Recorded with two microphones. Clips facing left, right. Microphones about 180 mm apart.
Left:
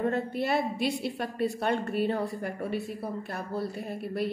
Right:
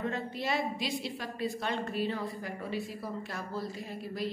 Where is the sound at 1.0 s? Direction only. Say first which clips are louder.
Left 6 dB; 60° left (ahead or behind).